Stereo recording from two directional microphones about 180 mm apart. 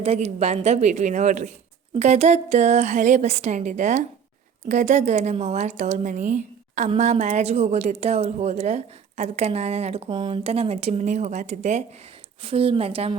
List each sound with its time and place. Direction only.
0.0 s a woman's voice: 35° right (ahead or behind)